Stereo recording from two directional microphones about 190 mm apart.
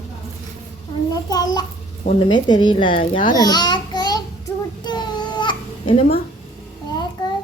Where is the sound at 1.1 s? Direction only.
20° left (ahead or behind).